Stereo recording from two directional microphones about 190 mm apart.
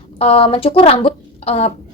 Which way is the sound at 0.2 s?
30° left (ahead or behind).